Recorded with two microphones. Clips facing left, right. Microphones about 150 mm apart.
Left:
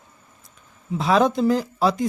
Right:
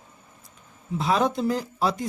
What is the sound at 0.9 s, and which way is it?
Speech, 90° left.